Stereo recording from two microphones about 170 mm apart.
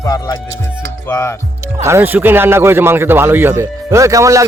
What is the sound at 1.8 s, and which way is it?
A man's voice, 15° right (ahead or behind).